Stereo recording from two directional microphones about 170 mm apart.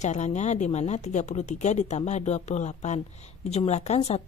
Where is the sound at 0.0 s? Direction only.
45° left (ahead or behind).